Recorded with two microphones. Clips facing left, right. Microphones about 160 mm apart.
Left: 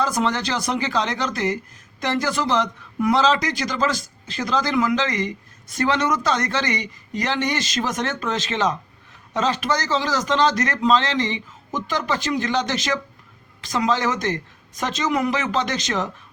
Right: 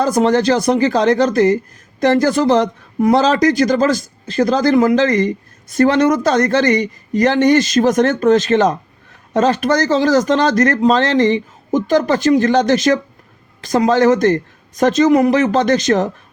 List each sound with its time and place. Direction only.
0.0 s speech: 45° right (ahead or behind)